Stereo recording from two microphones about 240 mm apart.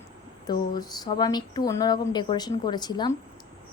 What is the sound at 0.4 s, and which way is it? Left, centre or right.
A woman's voice, centre.